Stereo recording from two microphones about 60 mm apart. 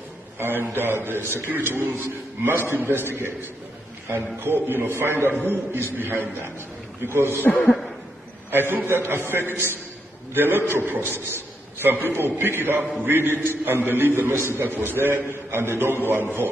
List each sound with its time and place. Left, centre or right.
0.4 s a man's voice: right
8.5 s a man's voice: right